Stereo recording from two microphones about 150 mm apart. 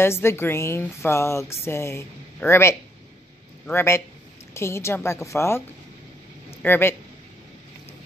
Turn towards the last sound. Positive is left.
turn(degrees=15)  # may be behind; listen again after turning